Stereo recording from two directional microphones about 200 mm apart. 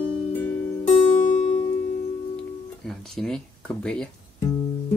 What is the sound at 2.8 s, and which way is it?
Speech, centre (ahead or behind).